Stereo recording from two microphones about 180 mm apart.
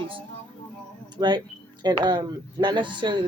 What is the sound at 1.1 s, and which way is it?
Speech, 25° right (ahead or behind).